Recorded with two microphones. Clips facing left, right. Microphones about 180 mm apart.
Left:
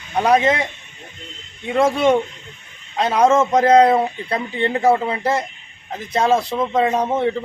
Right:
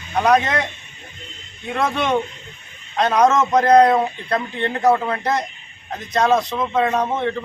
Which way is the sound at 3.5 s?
10° left (ahead or behind).